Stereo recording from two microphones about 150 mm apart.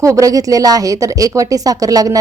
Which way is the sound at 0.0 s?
20° right (ahead or behind).